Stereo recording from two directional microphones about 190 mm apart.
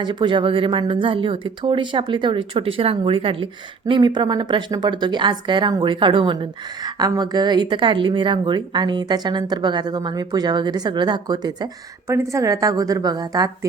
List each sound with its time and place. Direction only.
0.0 s speech: 25° right (ahead or behind)